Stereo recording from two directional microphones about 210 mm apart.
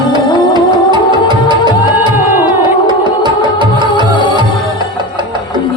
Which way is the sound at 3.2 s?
20° right (ahead or behind).